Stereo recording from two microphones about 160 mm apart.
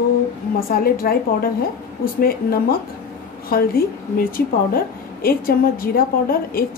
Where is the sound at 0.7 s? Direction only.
70° left (ahead or behind).